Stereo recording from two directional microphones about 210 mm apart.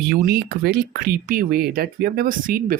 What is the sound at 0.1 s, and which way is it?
Speech, 45° right (ahead or behind).